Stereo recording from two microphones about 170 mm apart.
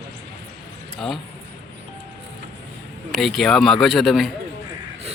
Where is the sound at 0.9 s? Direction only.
Centre (ahead or behind).